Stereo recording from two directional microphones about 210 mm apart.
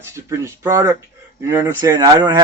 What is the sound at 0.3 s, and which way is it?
Speech, 15° right (ahead or behind).